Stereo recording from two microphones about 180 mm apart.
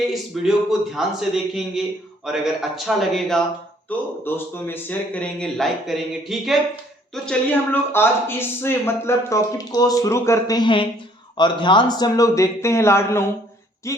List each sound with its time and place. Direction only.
0.4 s a man's voice: centre (ahead or behind); by 14.0 s 15° left (ahead or behind)